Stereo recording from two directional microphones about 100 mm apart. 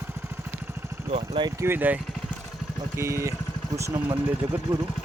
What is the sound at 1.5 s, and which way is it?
Speech, 20° right (ahead or behind).